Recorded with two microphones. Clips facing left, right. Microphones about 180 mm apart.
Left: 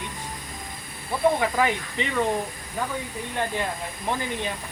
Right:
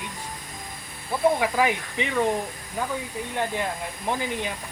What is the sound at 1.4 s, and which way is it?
Speech, 10° right (ahead or behind).